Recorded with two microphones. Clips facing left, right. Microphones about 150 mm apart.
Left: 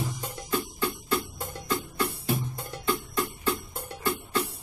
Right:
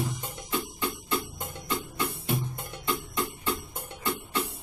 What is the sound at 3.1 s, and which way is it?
Music, 20° right (ahead or behind).